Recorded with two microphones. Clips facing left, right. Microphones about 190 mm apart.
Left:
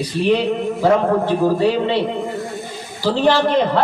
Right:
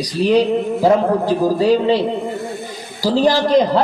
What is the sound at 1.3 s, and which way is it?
Speech, 40° right (ahead or behind).